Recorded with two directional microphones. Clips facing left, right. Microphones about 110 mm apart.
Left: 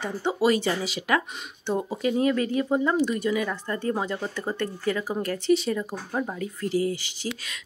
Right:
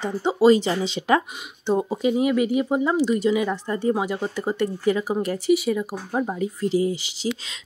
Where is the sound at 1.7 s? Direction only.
15° right (ahead or behind).